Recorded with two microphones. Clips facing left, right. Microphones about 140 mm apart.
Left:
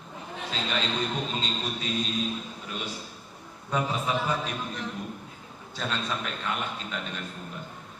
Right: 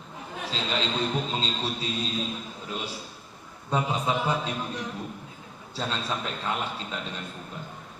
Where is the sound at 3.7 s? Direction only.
20° right (ahead or behind).